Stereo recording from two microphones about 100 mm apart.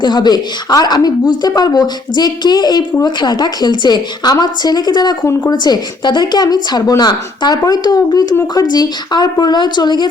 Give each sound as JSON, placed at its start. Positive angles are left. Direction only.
{"t": 0.0, "sound": "a woman's voice", "side_deg": 45}